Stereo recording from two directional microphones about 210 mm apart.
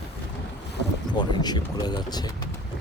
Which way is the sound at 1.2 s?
20° left (ahead or behind).